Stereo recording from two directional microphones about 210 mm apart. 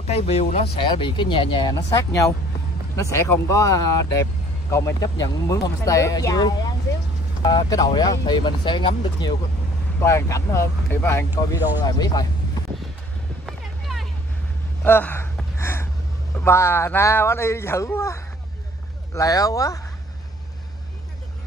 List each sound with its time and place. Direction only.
0.0 s speech: 30° left (ahead or behind)
13.5 s a sound: centre (ahead or behind)
14.8 s gasp: 10° left (ahead or behind)
16.3 s speech: 10° left (ahead or behind)